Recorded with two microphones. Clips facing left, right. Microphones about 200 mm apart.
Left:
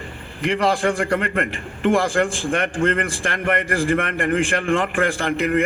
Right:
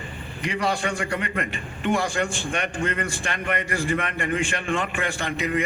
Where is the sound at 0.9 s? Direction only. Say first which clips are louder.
Left 7 dB; 55° left (ahead or behind).